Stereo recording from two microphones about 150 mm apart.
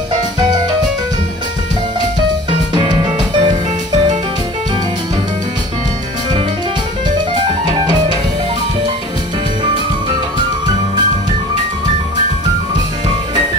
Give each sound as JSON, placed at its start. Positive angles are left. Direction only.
{"t": 2.7, "sound": "music", "side_deg": -30}